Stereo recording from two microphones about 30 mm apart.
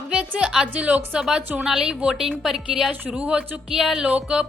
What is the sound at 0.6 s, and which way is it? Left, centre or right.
Speech, right.